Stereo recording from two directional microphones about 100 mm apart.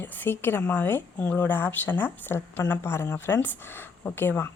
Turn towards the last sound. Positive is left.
turn(degrees=20)  # may be behind; listen again after turning